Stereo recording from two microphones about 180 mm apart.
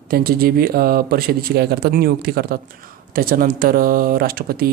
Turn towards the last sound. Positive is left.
turn(degrees=-55)  # may be behind; listen again after turning